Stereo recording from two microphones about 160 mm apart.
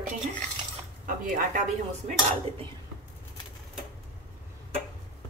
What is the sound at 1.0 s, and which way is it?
Speech, 55° right (ahead or behind).